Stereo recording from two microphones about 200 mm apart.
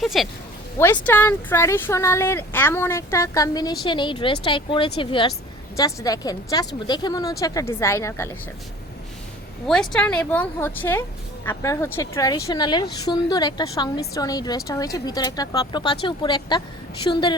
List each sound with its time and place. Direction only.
0.0 s speech: centre (ahead or behind)
0.8 s speech: 10° left (ahead or behind)
9.9 s speech: 5° left (ahead or behind); by 17.3 s 25° left (ahead or behind)